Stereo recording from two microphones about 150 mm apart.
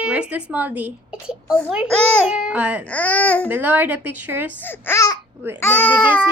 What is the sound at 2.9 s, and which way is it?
Speech, 10° left (ahead or behind).